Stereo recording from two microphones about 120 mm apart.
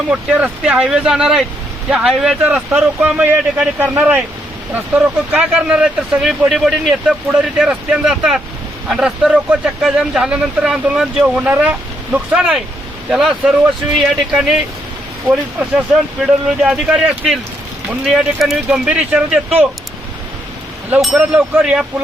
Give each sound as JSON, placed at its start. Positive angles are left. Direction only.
{"t": 0.1, "sound": "speech", "side_deg": -10}
{"t": 16.0, "sound": "speech", "side_deg": -5}
{"t": 21.2, "sound": "speech", "side_deg": -15}
{"t": 21.6, "sound": "speech", "side_deg": -5}